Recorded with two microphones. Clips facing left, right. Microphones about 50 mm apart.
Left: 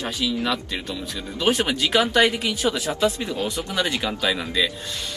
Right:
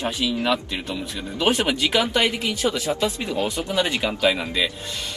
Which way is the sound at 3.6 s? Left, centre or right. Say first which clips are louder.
Right 3 dB; right.